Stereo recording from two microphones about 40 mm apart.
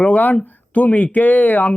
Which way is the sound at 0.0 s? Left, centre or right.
Left.